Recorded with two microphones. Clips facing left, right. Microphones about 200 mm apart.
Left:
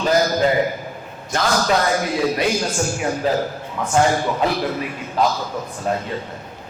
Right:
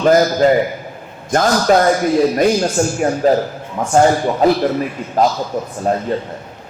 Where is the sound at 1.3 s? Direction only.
45° right (ahead or behind).